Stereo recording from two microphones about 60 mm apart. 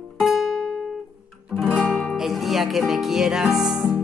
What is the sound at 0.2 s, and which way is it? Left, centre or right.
Guitar, centre.